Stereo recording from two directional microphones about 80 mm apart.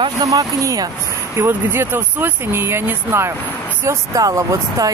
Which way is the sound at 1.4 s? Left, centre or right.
Right.